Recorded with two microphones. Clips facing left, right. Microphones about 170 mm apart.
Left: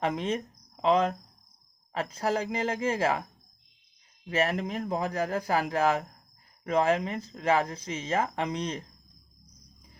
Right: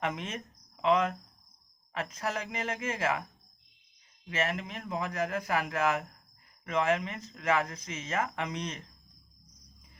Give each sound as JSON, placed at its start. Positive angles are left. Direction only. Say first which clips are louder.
{"t": 0.0, "sound": "speech", "louder": "left 6 dB", "side_deg": 35}
{"t": 4.3, "sound": "speech", "louder": "left 5 dB", "side_deg": 35}